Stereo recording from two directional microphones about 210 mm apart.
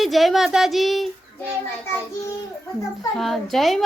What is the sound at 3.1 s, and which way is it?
Speech, centre (ahead or behind).